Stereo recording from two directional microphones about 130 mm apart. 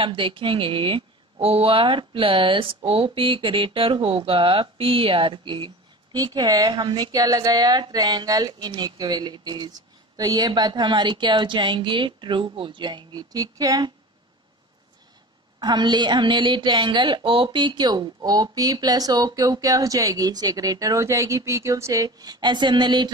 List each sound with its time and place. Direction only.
0.0 s a woman's voice: 40° right (ahead or behind)
15.6 s a woman's voice: 35° right (ahead or behind)